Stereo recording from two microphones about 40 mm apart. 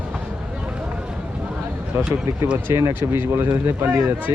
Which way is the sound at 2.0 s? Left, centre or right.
Right.